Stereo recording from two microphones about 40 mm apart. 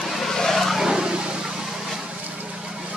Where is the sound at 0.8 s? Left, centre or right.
Centre.